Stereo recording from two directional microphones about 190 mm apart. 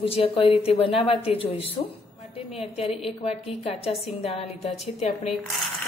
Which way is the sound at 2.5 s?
30° left (ahead or behind).